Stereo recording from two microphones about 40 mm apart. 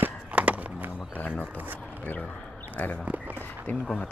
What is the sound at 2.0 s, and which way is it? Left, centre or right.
Speech, left.